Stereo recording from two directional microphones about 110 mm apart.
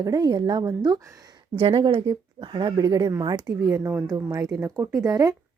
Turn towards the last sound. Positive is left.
turn(degrees=-30)  # may be behind; listen again after turning